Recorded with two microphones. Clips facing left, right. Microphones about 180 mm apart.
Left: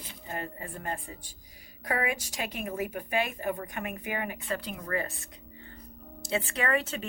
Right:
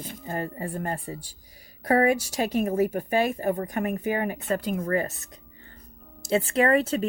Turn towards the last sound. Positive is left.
turn(degrees=-35)  # may be behind; listen again after turning